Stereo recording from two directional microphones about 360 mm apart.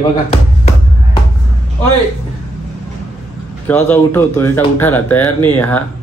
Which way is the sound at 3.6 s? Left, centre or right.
Centre.